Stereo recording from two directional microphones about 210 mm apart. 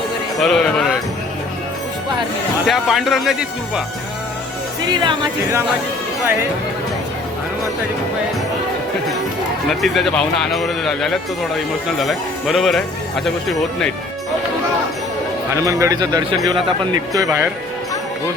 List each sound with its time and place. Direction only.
0.3 s speech: centre (ahead or behind)
2.6 s speech: centre (ahead or behind)
4.9 s speech: 15° right (ahead or behind)
9.6 s speech: centre (ahead or behind)
15.5 s speech: 15° right (ahead or behind)